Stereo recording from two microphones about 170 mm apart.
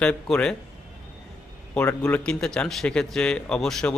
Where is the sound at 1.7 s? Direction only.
10° left (ahead or behind).